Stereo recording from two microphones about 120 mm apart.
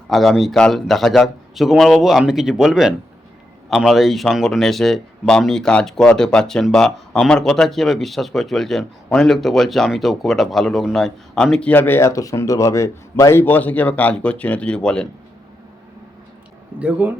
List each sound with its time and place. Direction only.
0.1 s a man's voice: centre (ahead or behind); by 13.4 s 25° left (ahead or behind)
13.4 s speech: 15° left (ahead or behind)
16.8 s speech: 15° right (ahead or behind)